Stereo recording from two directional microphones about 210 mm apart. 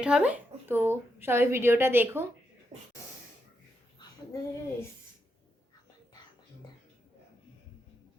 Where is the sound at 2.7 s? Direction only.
20° right (ahead or behind).